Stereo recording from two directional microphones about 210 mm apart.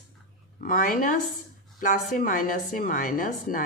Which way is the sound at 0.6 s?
40° left (ahead or behind).